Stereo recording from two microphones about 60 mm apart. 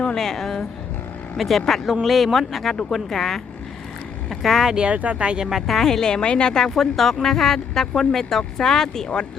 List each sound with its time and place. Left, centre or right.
0.0 s a woman's voice: centre
5.5 s speech: centre